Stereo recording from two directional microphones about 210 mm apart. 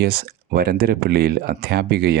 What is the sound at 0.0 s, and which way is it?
Speech, 50° right (ahead or behind).